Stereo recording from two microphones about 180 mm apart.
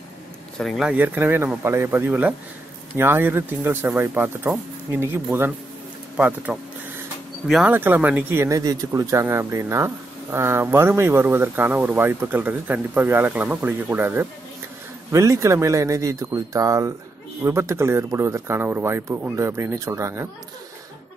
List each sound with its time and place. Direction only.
0.6 s speech: centre (ahead or behind); by 20.2 s 15° right (ahead or behind)